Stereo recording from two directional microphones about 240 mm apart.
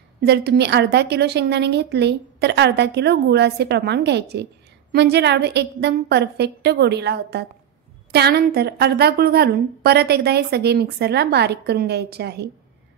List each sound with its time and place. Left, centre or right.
0.2 s a woman's voice: right